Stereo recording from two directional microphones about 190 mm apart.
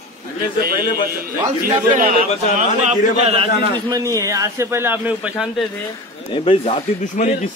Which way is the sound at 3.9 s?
15° right (ahead or behind).